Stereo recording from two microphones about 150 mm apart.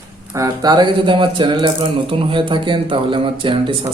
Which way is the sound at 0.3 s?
25° right (ahead or behind).